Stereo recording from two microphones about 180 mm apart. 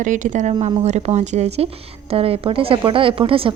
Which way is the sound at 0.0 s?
45° right (ahead or behind).